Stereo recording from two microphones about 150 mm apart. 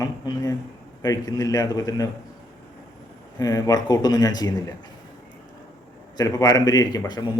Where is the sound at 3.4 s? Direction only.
25° left (ahead or behind).